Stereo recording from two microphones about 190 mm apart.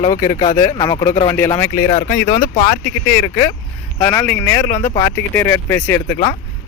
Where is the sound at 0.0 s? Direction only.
20° left (ahead or behind).